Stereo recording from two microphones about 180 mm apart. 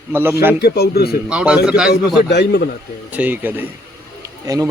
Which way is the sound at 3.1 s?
10° right (ahead or behind).